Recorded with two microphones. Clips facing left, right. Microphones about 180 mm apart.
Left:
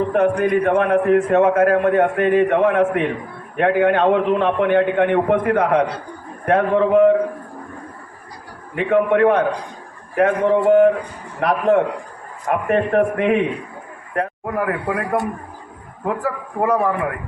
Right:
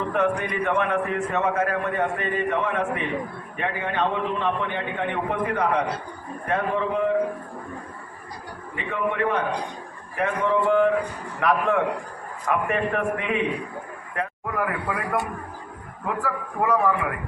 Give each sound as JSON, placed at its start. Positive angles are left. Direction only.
{"t": 0.1, "sound": "a man's voice", "side_deg": 45}
{"t": 8.7, "sound": "a man's voice", "side_deg": 60}
{"t": 10.5, "sound": "a man's voice", "side_deg": 45}
{"t": 16.0, "sound": "a man's voice", "side_deg": 45}